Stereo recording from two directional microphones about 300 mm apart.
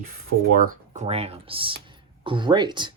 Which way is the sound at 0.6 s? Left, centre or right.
Right.